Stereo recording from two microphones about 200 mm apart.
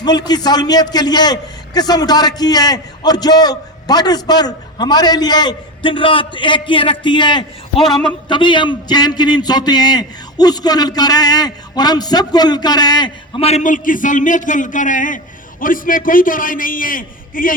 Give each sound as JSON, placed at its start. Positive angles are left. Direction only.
{"t": 0.0, "sound": "a man's voice", "side_deg": 20}